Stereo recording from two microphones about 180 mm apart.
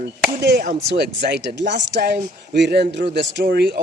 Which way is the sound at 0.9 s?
70° right (ahead or behind).